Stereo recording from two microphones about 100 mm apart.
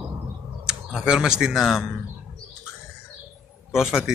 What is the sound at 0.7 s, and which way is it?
Speech, 10° right (ahead or behind).